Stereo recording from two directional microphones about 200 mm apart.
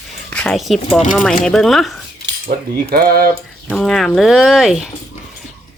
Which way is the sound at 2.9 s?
50° right (ahead or behind).